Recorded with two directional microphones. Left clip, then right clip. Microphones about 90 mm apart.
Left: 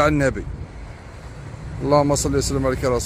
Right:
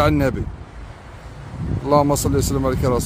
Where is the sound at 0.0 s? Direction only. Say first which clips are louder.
Even; 45° right (ahead or behind).